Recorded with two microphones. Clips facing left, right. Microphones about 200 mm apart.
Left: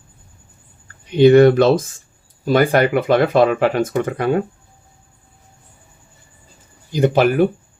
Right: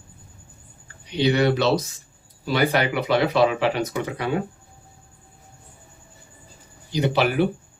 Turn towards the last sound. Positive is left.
turn(degrees=45)  # may be behind; listen again after turning